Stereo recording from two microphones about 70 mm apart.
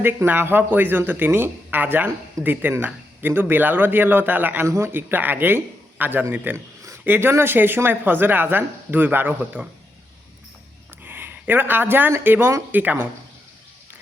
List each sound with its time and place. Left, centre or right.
0.0 s speech: right
4.6 s speech: right
11.0 s speech: right